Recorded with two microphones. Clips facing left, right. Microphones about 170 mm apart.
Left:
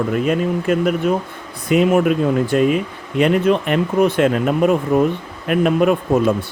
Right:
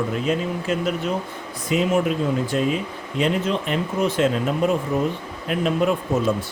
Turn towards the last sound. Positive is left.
turn(degrees=60)  # may be behind; listen again after turning